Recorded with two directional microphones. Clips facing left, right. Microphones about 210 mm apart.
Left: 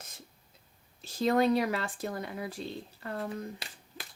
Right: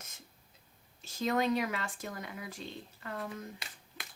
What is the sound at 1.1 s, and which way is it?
Speech, 35° left (ahead or behind).